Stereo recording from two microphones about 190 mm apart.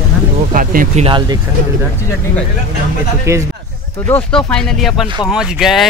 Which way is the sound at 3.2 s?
15° right (ahead or behind).